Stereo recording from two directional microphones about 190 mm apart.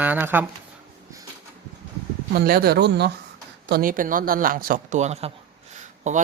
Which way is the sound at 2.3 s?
55° right (ahead or behind).